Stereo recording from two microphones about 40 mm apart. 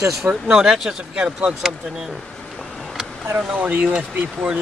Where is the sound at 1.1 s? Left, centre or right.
Right.